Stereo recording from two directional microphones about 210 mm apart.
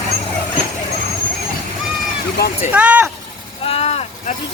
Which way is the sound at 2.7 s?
5° right (ahead or behind).